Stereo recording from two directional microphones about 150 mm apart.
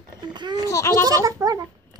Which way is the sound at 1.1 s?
20° right (ahead or behind).